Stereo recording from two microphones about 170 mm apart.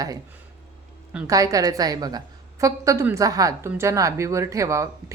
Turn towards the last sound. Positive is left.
turn(degrees=-20)  # may be behind; listen again after turning